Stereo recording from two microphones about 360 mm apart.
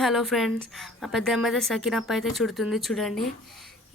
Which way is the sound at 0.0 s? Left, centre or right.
Centre.